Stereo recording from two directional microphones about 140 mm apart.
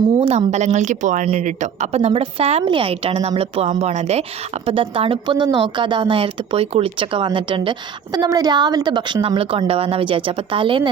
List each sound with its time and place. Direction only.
0.2 s a woman's voice: 50° right (ahead or behind)
3.7 s a woman's voice: 50° right (ahead or behind)